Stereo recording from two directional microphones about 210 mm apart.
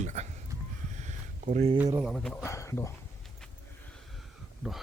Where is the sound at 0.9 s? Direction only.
35° right (ahead or behind).